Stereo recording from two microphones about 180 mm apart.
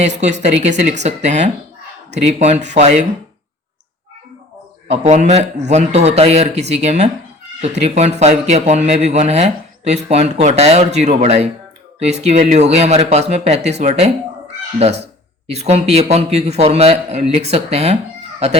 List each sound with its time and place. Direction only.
0.0 s speech: 40° right (ahead or behind)
4.9 s speech: 40° right (ahead or behind)